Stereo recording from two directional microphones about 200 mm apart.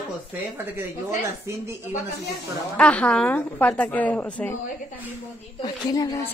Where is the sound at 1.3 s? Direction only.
15° right (ahead or behind).